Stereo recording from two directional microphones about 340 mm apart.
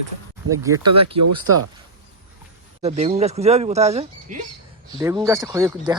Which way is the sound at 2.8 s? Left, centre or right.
Centre.